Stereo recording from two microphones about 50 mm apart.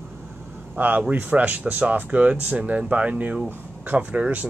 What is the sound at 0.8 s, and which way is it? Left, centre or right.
Speech, right.